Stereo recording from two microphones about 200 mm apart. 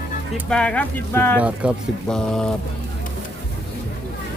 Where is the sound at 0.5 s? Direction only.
5° left (ahead or behind).